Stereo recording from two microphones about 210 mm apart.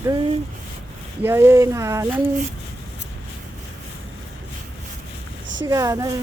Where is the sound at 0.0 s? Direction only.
20° right (ahead or behind).